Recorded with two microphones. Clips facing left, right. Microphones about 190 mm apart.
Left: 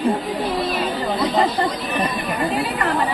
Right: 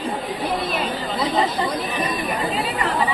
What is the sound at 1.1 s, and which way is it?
Chatter, 50° left (ahead or behind).